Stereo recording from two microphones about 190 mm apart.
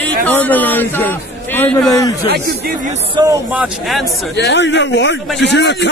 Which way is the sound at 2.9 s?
25° right (ahead or behind).